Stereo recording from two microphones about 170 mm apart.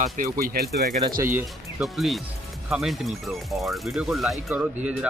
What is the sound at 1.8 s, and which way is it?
Speech, centre (ahead or behind).